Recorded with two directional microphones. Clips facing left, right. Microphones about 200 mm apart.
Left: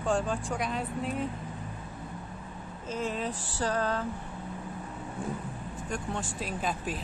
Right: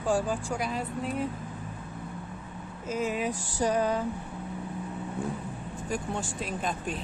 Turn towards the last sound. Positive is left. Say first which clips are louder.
# right 1 dB
turn(degrees=0)  # may be behind; listen again after turning